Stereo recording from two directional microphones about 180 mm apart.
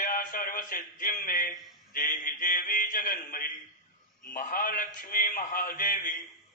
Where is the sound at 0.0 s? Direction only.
50° left (ahead or behind).